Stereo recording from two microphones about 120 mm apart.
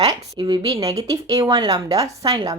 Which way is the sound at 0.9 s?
30° right (ahead or behind).